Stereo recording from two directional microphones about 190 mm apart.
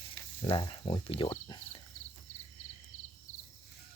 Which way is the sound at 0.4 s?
25° left (ahead or behind).